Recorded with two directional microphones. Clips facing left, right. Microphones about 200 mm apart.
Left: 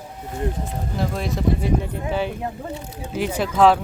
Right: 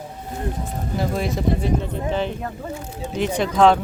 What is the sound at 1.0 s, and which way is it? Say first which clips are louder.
Speech: right 2 dB; centre (ahead or behind).